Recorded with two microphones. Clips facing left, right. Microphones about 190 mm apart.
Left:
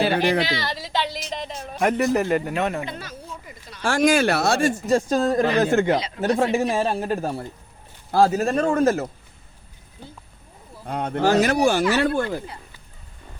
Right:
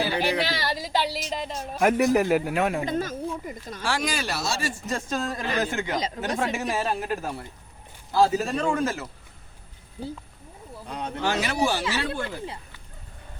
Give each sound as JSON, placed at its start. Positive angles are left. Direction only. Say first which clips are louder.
{"t": 0.0, "sound": "speech", "louder": "left 5 dB", "side_deg": 55}
{"t": 0.9, "sound": "speech", "louder": "left 1 dB", "side_deg": -5}
{"t": 2.8, "sound": "a sound", "louder": "right 7 dB", "side_deg": -45}
{"t": 3.8, "sound": "speech", "louder": "left 10 dB", "side_deg": 50}
{"t": 4.9, "sound": "speech", "louder": "left 9 dB", "side_deg": 35}
{"t": 8.1, "sound": "speech", "louder": "left 4 dB", "side_deg": 50}
{"t": 10.8, "sound": "speech", "louder": "left 6 dB", "side_deg": 55}
{"t": 11.2, "sound": "speech", "louder": "left 8 dB", "side_deg": 45}